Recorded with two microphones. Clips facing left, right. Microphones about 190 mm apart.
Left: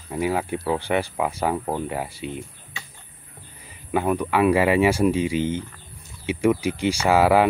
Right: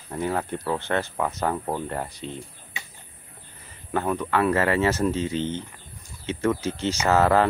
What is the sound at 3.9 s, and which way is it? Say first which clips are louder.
Speech: left 3 dB; 10° left (ahead or behind).